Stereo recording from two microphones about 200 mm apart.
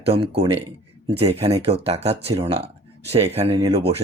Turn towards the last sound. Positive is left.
turn(degrees=-30)  # may be behind; listen again after turning